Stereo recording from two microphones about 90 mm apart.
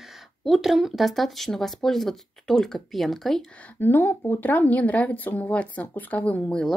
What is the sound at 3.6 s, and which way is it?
A woman's voice, 20° left (ahead or behind).